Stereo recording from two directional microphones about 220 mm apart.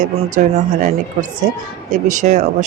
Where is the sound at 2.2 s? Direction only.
30° right (ahead or behind).